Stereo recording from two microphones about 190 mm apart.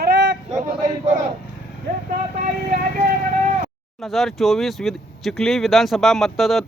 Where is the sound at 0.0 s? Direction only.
60° right (ahead or behind).